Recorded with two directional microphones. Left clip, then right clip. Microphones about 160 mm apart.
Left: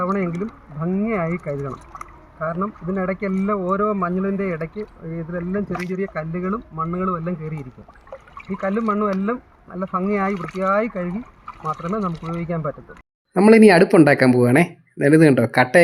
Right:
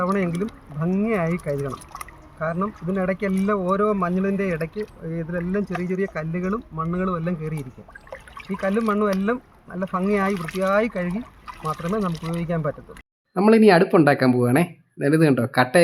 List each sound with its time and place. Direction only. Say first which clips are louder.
0.0 s speech: left 1 dB; 20° right (ahead or behind)
10.9 s speech: even; 30° right (ahead or behind)
13.3 s speech: left 3 dB; 20° left (ahead or behind)